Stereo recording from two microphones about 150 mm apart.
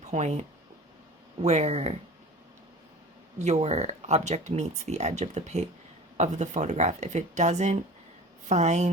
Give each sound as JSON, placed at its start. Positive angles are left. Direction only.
{"t": 0.0, "sound": "speech", "side_deg": -50}
{"t": 3.3, "sound": "speech", "side_deg": -50}